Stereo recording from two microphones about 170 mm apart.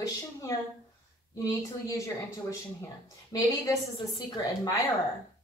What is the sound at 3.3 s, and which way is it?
A woman's voice, 20° left (ahead or behind).